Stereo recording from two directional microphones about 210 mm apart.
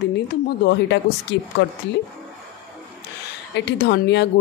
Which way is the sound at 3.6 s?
55° left (ahead or behind).